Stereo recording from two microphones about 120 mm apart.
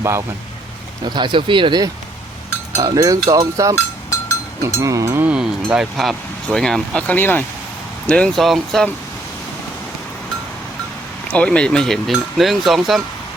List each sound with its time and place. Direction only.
0.0 s speech: 25° right (ahead or behind)
1.0 s speech: 40° right (ahead or behind)
2.7 s speech: 30° right (ahead or behind)
4.8 s speech: 25° right (ahead or behind)
5.2 s speech: 10° right (ahead or behind)
11.3 s speech: 10° left (ahead or behind)